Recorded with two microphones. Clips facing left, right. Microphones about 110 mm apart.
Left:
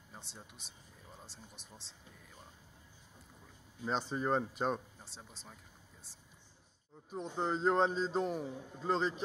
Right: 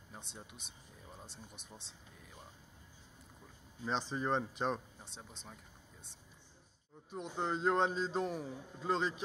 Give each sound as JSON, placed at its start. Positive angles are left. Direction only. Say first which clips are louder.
{"t": 0.1, "sound": "speech", "louder": "right 1 dB", "side_deg": 0}
{"t": 3.8, "sound": "speech", "louder": "left 2 dB", "side_deg": 5}
{"t": 7.1, "sound": "speech", "louder": "left 2 dB", "side_deg": 0}